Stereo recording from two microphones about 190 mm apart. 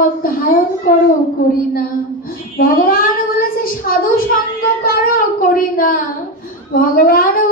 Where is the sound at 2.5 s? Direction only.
50° left (ahead or behind).